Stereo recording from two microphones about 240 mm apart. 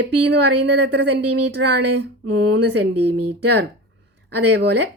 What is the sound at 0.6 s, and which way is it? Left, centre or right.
Speech, right.